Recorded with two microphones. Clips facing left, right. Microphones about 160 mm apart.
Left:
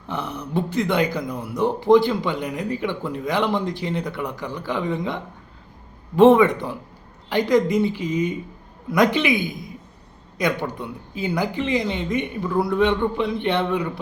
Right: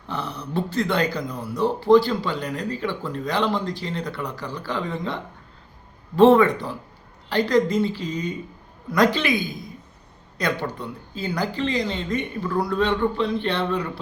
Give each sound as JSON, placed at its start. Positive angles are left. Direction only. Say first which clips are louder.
{"t": 0.1, "sound": "a woman's voice", "louder": "left 2 dB", "side_deg": 15}